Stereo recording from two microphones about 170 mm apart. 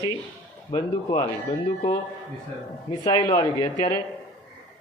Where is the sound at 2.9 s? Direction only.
30° left (ahead or behind).